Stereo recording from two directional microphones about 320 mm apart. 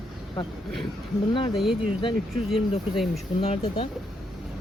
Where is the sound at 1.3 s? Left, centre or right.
Centre.